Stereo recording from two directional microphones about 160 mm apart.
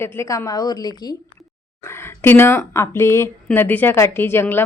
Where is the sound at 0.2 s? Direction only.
20° left (ahead or behind).